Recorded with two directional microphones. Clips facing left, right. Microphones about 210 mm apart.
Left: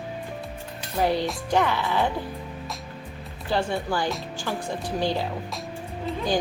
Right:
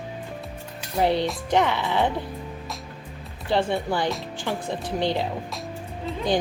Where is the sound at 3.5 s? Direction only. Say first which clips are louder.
Right 2 dB; 20° right (ahead or behind).